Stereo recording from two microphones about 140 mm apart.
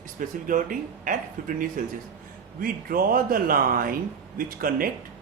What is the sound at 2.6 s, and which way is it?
Speech, 90° right.